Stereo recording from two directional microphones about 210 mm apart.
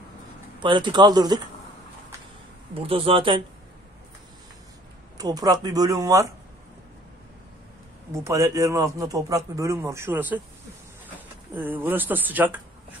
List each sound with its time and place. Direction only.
0.6 s speech: 20° right (ahead or behind)
2.9 s speech: 25° right (ahead or behind)
5.1 s a man's voice: 20° right (ahead or behind)
8.1 s a man's voice: 15° right (ahead or behind)
11.5 s a man's voice: 10° right (ahead or behind)